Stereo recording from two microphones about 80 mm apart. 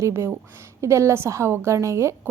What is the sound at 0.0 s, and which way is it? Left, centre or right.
A woman's voice, right.